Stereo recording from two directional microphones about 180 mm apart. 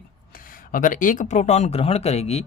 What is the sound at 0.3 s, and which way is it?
Speech, 50° left (ahead or behind).